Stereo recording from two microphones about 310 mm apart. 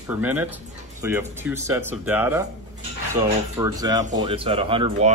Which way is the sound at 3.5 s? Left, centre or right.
Centre.